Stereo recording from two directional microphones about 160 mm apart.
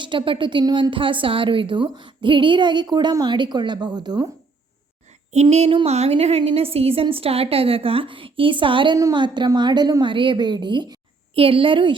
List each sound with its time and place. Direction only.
0.0 s speech: 30° right (ahead or behind)
5.3 s a woman's voice: 45° right (ahead or behind)